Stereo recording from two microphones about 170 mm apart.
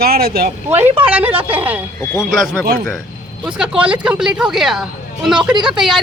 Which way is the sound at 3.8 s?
5° right (ahead or behind).